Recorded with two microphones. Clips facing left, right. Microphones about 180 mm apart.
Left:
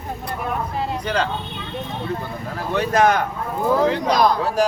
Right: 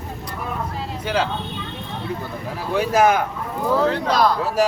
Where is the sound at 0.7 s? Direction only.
60° left (ahead or behind).